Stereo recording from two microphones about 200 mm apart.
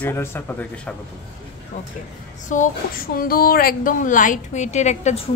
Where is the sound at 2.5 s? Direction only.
40° left (ahead or behind).